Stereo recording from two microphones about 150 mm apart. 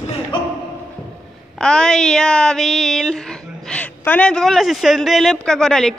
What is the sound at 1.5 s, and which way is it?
Speech, 5° left (ahead or behind).